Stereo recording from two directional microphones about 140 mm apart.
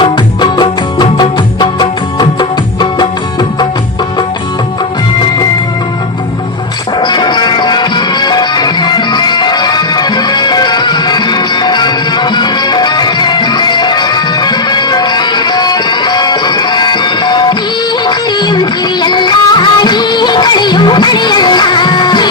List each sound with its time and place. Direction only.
0.0 s music: 35° left (ahead or behind)
7.0 s music: 35° left (ahead or behind)